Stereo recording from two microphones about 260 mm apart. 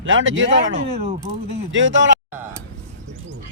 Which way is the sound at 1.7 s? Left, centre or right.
Right.